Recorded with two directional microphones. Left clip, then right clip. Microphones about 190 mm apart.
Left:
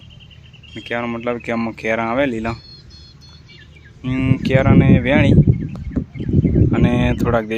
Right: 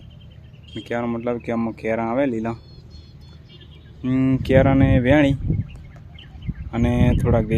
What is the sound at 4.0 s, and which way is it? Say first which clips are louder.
Speech: even; 30° right (ahead or behind).